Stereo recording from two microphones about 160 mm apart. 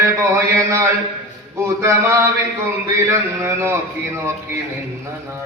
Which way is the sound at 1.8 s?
15° right (ahead or behind).